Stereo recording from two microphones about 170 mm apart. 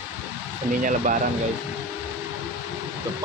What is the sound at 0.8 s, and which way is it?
Speech, 50° right (ahead or behind).